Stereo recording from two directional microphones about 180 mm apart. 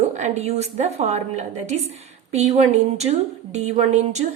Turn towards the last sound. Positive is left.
turn(degrees=-40)  # may be behind; listen again after turning